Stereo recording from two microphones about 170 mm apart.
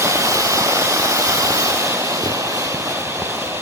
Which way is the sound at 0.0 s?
15° right (ahead or behind).